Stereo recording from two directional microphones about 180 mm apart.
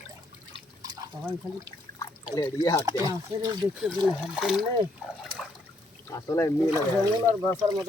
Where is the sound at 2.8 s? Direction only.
20° right (ahead or behind).